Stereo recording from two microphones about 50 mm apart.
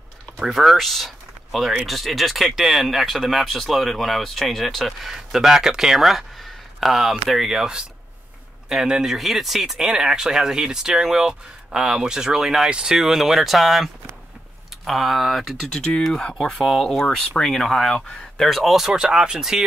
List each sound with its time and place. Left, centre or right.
0.4 s speech: centre
14.9 s speech: centre
15.7 s speech: centre
16.3 s speech: centre